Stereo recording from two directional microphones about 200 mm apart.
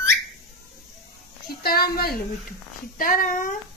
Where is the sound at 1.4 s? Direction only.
50° left (ahead or behind).